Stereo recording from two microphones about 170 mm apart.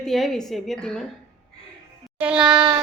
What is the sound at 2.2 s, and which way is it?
Speech, 5° right (ahead or behind).